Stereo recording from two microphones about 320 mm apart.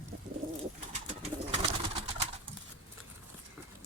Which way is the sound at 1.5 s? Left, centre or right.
Centre.